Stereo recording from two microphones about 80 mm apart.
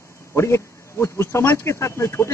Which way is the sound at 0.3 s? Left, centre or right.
Left.